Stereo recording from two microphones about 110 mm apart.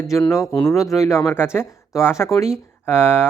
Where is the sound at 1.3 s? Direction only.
20° left (ahead or behind).